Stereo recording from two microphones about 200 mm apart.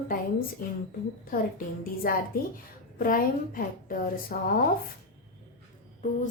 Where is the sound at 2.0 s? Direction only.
45° left (ahead or behind).